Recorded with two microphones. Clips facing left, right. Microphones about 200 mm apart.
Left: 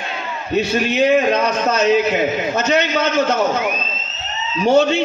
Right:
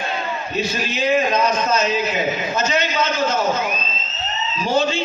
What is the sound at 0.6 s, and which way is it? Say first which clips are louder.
A man's voice: left 8 dB; 65° left (ahead or behind).